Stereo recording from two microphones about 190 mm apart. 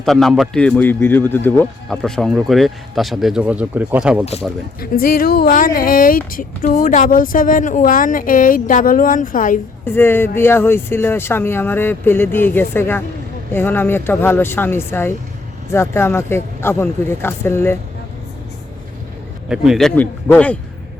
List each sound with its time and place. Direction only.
0.0 s speech: centre (ahead or behind)
4.8 s speech: 50° left (ahead or behind)
9.8 s speech: 10° left (ahead or behind)
19.5 s speech: centre (ahead or behind)